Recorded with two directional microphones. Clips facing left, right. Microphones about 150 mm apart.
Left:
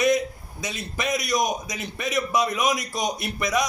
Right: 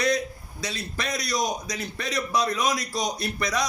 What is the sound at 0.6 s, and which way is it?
A man's voice, 15° left (ahead or behind).